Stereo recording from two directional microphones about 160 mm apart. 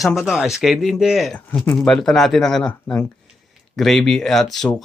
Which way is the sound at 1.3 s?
10° left (ahead or behind).